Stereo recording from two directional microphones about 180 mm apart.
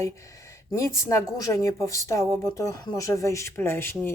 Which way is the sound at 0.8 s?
15° left (ahead or behind).